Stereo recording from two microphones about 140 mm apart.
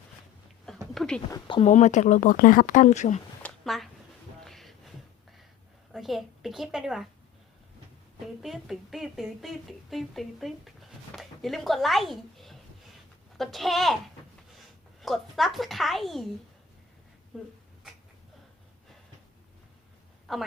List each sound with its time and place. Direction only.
0.9 s speech: 5° left (ahead or behind)
1.3 s speech: 35° left (ahead or behind)
1.6 s speech: 60° left (ahead or behind)
3.4 s a sound: centre (ahead or behind)
5.9 s speech: centre (ahead or behind)
8.4 s a woman's voice: centre (ahead or behind)
15.0 s speech: centre (ahead or behind)
17.3 s speech: centre (ahead or behind)
20.3 s a woman's voice: centre (ahead or behind)